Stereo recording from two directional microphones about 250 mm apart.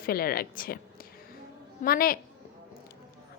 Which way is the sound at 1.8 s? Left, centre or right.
Left.